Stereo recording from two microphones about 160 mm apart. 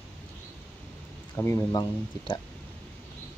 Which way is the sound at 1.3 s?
15° left (ahead or behind).